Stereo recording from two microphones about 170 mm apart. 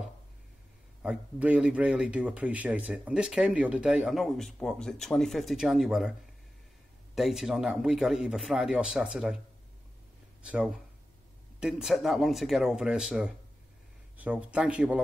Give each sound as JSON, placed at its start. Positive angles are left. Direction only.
{"t": 1.0, "sound": "speech", "side_deg": -5}
{"t": 7.2, "sound": "speech", "side_deg": 0}
{"t": 10.4, "sound": "speech", "side_deg": -5}